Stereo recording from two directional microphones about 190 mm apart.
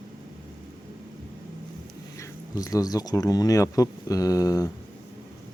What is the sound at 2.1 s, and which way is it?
Speech, 15° left (ahead or behind).